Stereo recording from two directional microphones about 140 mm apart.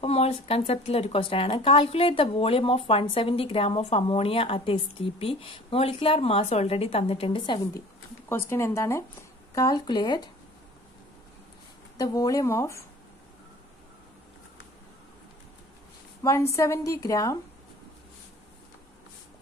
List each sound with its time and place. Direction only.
0.0 s a woman's voice: 45° left (ahead or behind)
8.3 s a woman's voice: 15° left (ahead or behind)
12.0 s a woman's voice: 25° left (ahead or behind)
16.2 s a woman's voice: 20° left (ahead or behind)